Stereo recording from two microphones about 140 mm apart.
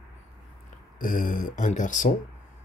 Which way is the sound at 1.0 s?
70° left (ahead or behind).